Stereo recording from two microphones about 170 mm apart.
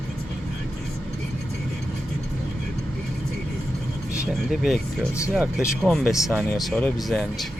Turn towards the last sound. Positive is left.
turn(degrees=0)  # may be behind; listen again after turning